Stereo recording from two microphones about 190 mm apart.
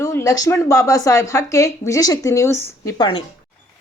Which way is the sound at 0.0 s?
15° left (ahead or behind).